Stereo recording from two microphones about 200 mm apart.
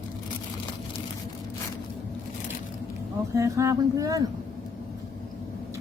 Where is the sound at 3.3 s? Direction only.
15° right (ahead or behind).